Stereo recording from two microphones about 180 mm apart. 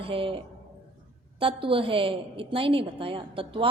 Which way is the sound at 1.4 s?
30° right (ahead or behind).